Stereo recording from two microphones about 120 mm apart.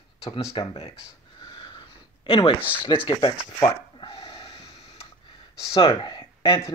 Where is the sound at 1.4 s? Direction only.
40° left (ahead or behind).